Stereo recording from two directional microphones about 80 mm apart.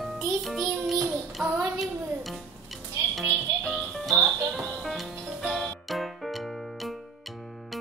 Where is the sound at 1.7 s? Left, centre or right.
Centre.